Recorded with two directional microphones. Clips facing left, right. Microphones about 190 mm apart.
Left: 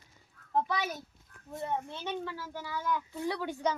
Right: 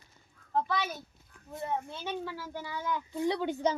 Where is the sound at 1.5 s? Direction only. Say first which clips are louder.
Even; 5° right (ahead or behind).